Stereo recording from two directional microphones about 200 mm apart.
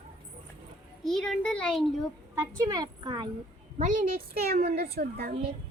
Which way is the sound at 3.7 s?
40° right (ahead or behind).